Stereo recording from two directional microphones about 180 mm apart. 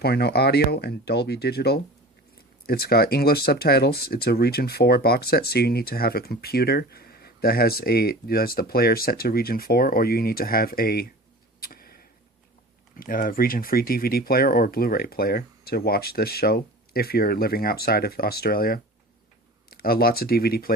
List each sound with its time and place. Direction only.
0.0 s speech: 60° left (ahead or behind)
11.6 s a sound: 55° left (ahead or behind)
13.0 s speech: 50° left (ahead or behind)